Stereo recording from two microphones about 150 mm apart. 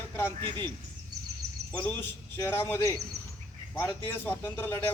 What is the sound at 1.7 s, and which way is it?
A man's voice, 10° left (ahead or behind).